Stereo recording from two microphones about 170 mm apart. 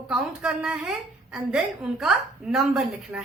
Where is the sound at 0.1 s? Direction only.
Centre (ahead or behind).